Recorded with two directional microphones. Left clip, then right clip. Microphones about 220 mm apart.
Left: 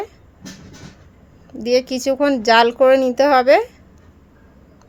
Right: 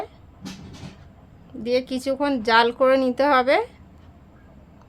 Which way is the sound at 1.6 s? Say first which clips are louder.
Left 6 dB; 20° left (ahead or behind).